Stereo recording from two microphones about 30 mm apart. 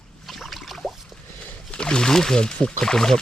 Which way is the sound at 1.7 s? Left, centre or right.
Left.